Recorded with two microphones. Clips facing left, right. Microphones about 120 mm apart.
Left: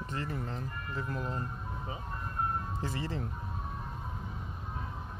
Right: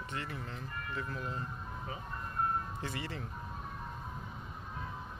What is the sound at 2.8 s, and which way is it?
Speech, 35° left (ahead or behind).